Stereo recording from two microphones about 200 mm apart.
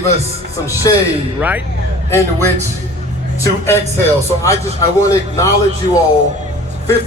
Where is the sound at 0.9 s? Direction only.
15° left (ahead or behind).